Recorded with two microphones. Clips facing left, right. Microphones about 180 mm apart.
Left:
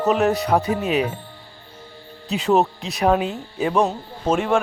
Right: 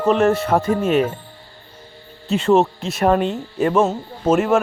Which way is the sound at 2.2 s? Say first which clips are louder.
Right 3 dB; centre (ahead or behind).